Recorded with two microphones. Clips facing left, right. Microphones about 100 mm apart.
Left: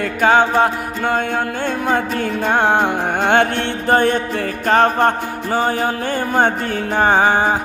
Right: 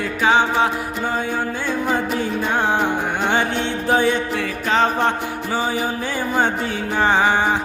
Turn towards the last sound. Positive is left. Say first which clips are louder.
# left 3 dB
turn(degrees=45)  # may be behind; listen again after turning